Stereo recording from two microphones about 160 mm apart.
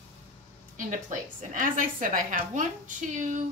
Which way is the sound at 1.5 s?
55° right (ahead or behind).